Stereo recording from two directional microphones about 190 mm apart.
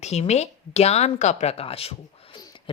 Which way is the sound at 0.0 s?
35° left (ahead or behind).